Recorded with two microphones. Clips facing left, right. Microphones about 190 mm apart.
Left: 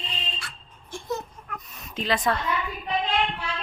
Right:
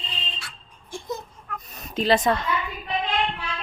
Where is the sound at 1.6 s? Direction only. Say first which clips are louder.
Right 6 dB; 35° right (ahead or behind).